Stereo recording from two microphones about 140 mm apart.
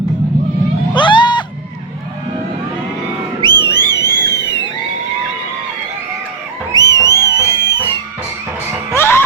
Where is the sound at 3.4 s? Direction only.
35° right (ahead or behind).